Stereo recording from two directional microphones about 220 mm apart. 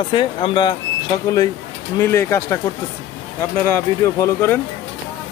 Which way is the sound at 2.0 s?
10° left (ahead or behind).